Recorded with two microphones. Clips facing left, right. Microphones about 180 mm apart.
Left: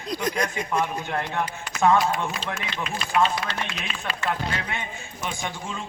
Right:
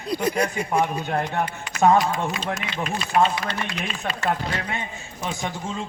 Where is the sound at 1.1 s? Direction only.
40° right (ahead or behind).